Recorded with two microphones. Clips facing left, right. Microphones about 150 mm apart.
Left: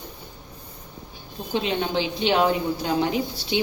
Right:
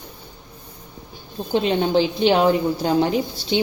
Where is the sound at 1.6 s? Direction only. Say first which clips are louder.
Right 7 dB; 35° right (ahead or behind).